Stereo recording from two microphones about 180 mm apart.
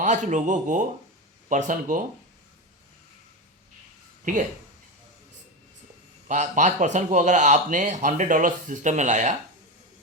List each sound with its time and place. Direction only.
0.0 s speech: 40° right (ahead or behind)
4.3 s speech: 45° right (ahead or behind)
6.2 s a man's voice: 40° right (ahead or behind)